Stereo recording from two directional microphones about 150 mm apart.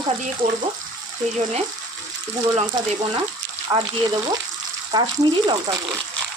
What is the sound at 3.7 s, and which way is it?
Frying, 25° right (ahead or behind).